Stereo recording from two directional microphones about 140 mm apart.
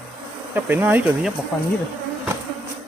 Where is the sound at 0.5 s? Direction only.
15° right (ahead or behind).